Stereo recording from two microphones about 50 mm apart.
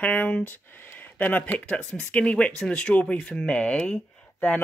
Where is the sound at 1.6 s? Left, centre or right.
Left.